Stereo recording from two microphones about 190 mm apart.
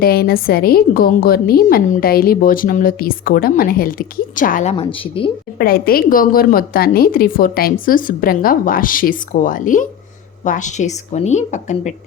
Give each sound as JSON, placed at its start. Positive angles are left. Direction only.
{"t": 0.0, "sound": "a woman's voice", "side_deg": 55}
{"t": 5.5, "sound": "a woman's voice", "side_deg": 50}